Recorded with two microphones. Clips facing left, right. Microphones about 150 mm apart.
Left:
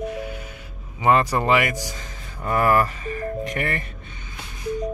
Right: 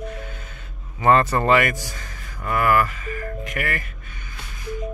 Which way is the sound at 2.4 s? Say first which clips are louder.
Left 1 dB; 30° left (ahead or behind).